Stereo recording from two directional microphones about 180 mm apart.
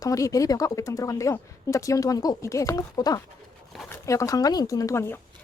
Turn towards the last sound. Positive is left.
turn(degrees=15)  # may be behind; listen again after turning